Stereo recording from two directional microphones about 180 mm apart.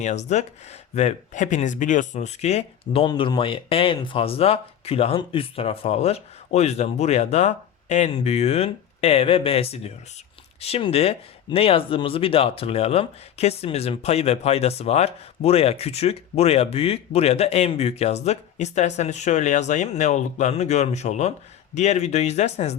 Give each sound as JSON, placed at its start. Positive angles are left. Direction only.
{"t": 0.0, "sound": "speech", "side_deg": 40}